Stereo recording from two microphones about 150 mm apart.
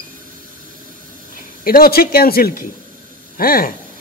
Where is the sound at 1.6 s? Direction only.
80° left.